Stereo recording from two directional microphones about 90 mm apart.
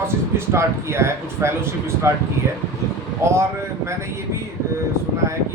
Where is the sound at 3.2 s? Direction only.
30° right (ahead or behind).